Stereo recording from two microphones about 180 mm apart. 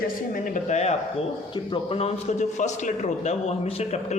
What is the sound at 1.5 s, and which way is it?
A man's voice, 30° left (ahead or behind).